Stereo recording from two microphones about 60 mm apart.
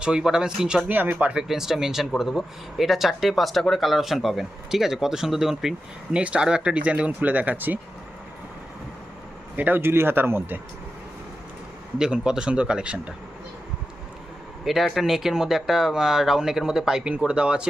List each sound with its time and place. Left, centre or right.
0.0 s speech: centre
0.9 s speech: right
1.3 s speech: centre
6.1 s speech: centre
9.6 s speech: right
11.9 s speech: centre
14.6 s speech: centre